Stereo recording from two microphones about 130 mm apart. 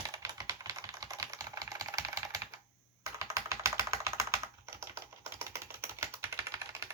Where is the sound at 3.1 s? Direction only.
20° right (ahead or behind).